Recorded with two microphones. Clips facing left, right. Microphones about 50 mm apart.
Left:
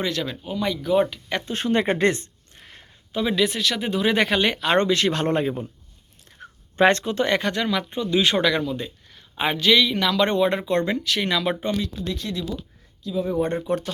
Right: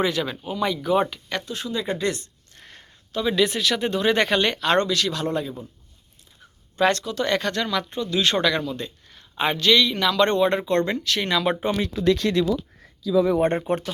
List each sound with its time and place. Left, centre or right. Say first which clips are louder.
0.0 s speech: right 3 dB; centre
1.5 s speech: left 8 dB; left
2.6 s a sound: even; centre
3.3 s speech: right 2 dB; centre
4.8 s speech: left 2 dB; left
6.4 s a sound: left 10 dB; left
6.7 s speech: left 3 dB; left
7.3 s speech: right 1 dB; centre
12.0 s speech: right 9 dB; right
13.6 s speech: even; right